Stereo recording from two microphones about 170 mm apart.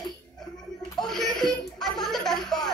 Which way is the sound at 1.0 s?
Centre (ahead or behind).